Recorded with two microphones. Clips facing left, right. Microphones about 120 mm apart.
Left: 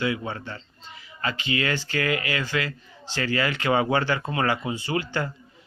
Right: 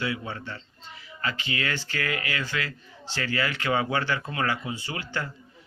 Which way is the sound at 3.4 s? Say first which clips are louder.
Left 3 dB; 25° left (ahead or behind).